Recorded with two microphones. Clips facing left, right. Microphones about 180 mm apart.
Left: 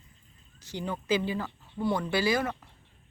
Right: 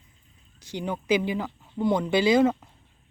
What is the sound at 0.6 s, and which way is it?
Speech, 15° right (ahead or behind).